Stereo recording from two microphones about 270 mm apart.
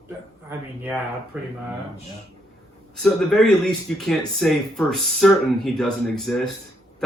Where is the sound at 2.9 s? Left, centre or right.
Centre.